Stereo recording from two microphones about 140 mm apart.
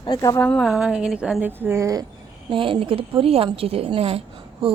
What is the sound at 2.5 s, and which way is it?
A woman's voice, 40° right (ahead or behind).